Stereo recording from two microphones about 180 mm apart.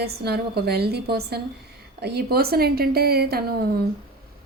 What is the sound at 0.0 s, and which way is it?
A woman's voice, 65° right (ahead or behind).